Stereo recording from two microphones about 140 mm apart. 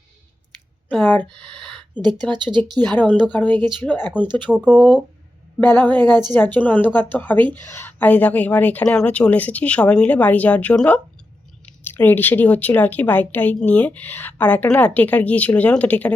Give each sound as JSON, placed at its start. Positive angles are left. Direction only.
{"t": 0.9, "sound": "speech", "side_deg": 10}
{"t": 1.4, "sound": "a sound", "side_deg": 5}
{"t": 2.3, "sound": "speech", "side_deg": -35}
{"t": 3.3, "sound": "a woman's voice", "side_deg": 10}
{"t": 4.4, "sound": "speech", "side_deg": -5}
{"t": 5.5, "sound": "a woman's voice", "side_deg": 15}
{"t": 6.0, "sound": "a woman's voice", "side_deg": -30}
{"t": 6.3, "sound": "a woman's voice", "side_deg": 15}